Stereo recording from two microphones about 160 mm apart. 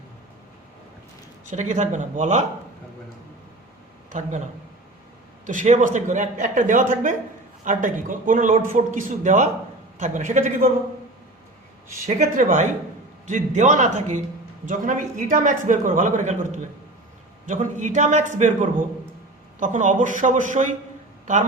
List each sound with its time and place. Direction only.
1.5 s a man's voice: 50° right (ahead or behind)
4.1 s a man's voice: 50° right (ahead or behind)
5.5 s a man's voice: 50° right (ahead or behind)
12.0 s a man's voice: 55° right (ahead or behind)